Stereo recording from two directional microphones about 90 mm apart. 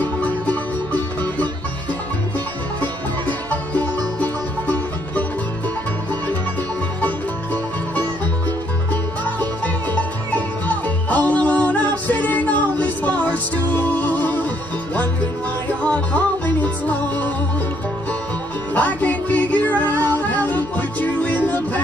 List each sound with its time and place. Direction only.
0.0 s music: 15° left (ahead or behind)
3.4 s music: 15° left (ahead or behind)
9.9 s music: 15° left (ahead or behind)
15.8 s music: 15° left (ahead or behind)
18.8 s music: 20° left (ahead or behind)